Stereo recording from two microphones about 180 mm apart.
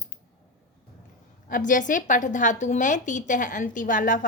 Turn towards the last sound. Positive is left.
turn(degrees=45)  # may be behind; listen again after turning